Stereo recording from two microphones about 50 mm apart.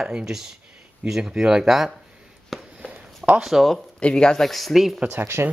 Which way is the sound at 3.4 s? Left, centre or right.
Centre.